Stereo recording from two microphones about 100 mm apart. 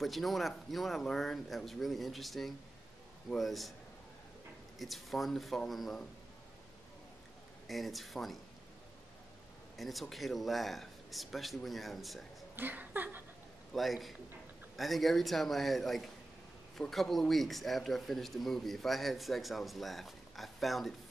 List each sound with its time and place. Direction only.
0.0 s a man's voice: centre (ahead or behind)
4.7 s a man's voice: centre (ahead or behind)
7.6 s a man's voice: centre (ahead or behind)
9.8 s a man's voice: centre (ahead or behind)
12.5 s speech: 20° right (ahead or behind)
13.7 s a man's voice: centre (ahead or behind)